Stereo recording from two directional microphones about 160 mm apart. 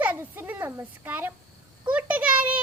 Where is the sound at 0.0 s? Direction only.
10° right (ahead or behind).